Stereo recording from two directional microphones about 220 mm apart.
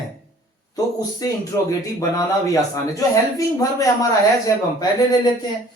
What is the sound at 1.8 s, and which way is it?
Speech, 15° left (ahead or behind).